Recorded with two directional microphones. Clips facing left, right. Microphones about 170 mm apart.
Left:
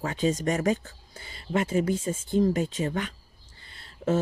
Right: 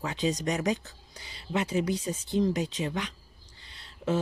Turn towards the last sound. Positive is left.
turn(degrees=50)  # may be behind; listen again after turning